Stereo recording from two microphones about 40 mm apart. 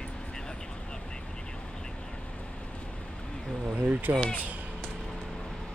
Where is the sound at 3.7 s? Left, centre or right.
Right.